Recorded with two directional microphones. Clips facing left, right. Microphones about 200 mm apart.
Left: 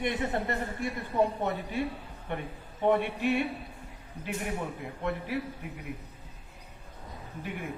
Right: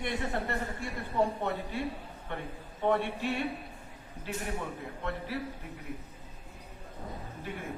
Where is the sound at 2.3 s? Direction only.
15° left (ahead or behind).